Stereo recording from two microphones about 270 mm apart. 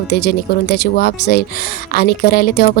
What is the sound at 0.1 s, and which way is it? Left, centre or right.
A woman's voice, left.